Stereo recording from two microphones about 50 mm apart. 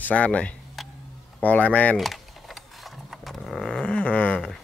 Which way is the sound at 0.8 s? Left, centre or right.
Centre.